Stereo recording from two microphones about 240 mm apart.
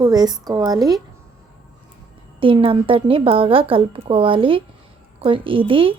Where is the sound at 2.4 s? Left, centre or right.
Right.